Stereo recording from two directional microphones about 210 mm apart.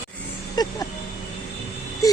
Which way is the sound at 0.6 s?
20° left (ahead or behind).